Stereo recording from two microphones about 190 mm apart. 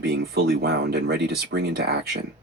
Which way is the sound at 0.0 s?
55° right (ahead or behind).